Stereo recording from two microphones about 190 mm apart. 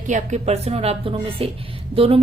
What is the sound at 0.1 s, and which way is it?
A woman's voice, 35° right (ahead or behind).